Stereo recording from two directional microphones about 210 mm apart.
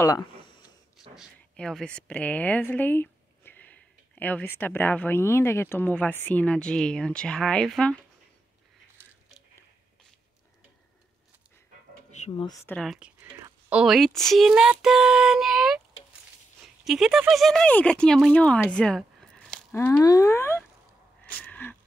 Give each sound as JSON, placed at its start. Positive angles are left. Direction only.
{"t": 0.0, "sound": "speech", "side_deg": 15}
{"t": 1.1, "sound": "a woman's voice", "side_deg": 0}
{"t": 12.3, "sound": "speech", "side_deg": 20}
{"t": 12.6, "sound": "speech", "side_deg": 5}
{"t": 21.3, "sound": "a sound", "side_deg": 5}